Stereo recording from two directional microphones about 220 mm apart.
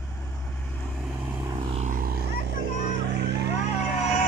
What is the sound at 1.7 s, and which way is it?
Vehicle, 35° right (ahead or behind).